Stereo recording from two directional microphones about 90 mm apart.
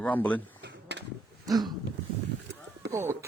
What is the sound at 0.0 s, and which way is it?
Speech, 20° left (ahead or behind).